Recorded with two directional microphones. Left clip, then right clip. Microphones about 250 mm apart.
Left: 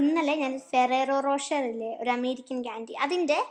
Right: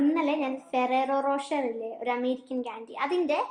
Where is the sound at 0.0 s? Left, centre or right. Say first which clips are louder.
Left 1 dB; left.